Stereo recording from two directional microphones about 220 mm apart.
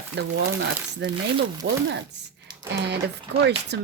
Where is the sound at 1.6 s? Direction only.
50° right (ahead or behind).